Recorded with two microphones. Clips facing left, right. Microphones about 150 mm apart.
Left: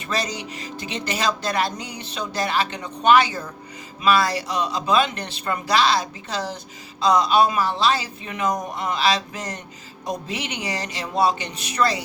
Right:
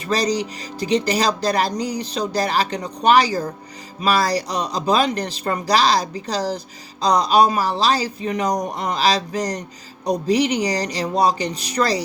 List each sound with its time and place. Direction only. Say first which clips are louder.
0.1 s speech: right 7 dB; 35° right (ahead or behind)